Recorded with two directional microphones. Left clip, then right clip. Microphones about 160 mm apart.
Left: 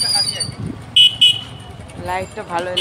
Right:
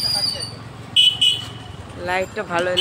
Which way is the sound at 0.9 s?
90° left.